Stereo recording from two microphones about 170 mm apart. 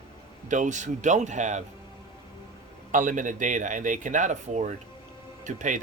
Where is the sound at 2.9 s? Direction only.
50° right (ahead or behind).